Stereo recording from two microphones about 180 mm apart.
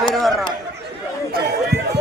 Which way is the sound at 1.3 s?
60° right (ahead or behind).